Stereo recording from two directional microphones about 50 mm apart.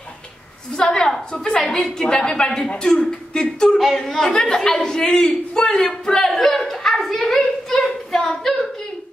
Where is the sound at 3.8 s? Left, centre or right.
Centre.